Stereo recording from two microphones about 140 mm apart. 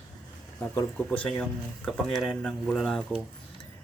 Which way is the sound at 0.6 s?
10° left (ahead or behind).